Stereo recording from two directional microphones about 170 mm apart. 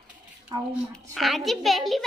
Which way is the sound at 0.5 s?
25° right (ahead or behind).